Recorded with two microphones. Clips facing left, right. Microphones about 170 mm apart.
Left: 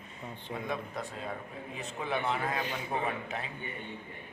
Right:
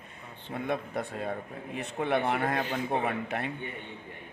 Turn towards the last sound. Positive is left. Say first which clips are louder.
# right 4 dB
turn(degrees=-65)  # may be behind; listen again after turning